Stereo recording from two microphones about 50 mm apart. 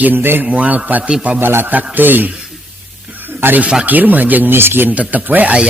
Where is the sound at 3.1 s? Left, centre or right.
Right.